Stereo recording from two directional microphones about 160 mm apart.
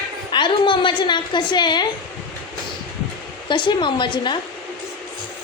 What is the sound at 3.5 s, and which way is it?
Speech, 30° left (ahead or behind).